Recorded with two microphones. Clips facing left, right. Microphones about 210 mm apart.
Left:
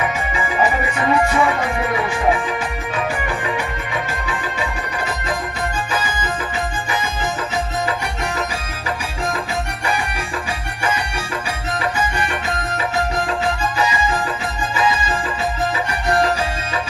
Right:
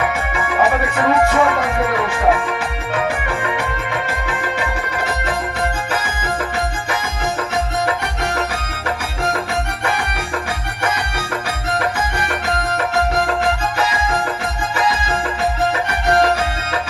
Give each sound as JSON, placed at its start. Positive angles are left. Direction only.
{"t": 0.3, "sound": "music", "side_deg": -60}
{"t": 12.7, "sound": "music", "side_deg": -65}